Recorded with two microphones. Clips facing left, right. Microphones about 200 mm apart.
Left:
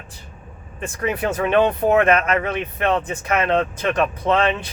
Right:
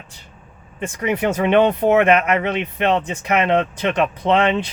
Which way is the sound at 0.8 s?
20° right (ahead or behind).